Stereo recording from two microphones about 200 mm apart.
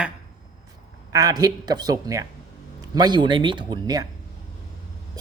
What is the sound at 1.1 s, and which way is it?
Speech, 20° right (ahead or behind).